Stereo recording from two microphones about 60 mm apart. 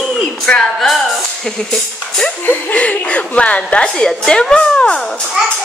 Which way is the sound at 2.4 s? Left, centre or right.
Left.